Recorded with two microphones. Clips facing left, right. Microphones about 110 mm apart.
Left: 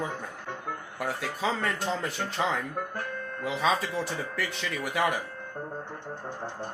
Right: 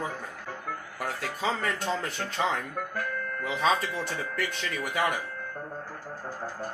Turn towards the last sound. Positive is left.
turn(degrees=25)  # may be behind; listen again after turning